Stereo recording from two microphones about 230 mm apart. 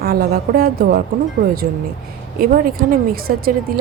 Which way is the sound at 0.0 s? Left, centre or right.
Right.